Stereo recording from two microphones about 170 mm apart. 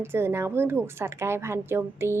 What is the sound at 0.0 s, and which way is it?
Speech, 15° right (ahead or behind).